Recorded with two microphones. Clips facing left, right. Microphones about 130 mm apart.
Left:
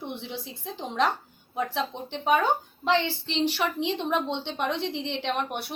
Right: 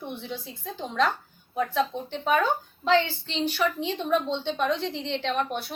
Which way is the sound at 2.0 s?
20° left (ahead or behind).